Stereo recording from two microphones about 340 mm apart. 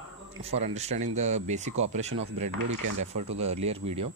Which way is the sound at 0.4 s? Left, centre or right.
Centre.